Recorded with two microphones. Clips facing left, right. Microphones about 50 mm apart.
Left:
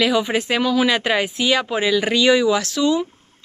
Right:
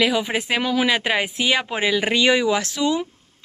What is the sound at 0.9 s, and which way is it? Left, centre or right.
Speech, centre.